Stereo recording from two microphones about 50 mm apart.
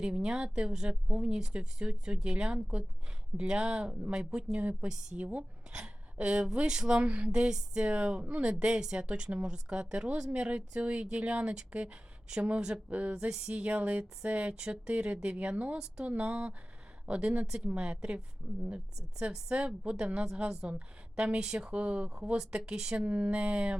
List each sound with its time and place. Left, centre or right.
0.0 s speech: centre
5.2 s speech: right
19.5 s speech: right
23.0 s speech: right